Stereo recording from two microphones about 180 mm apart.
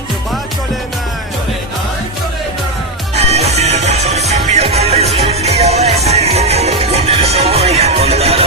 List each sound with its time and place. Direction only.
3.2 s music: 35° right (ahead or behind)